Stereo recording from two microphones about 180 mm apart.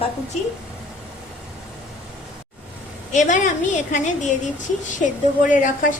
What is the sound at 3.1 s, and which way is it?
Speech, 40° left (ahead or behind).